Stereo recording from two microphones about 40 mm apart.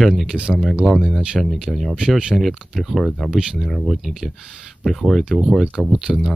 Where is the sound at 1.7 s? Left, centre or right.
Centre.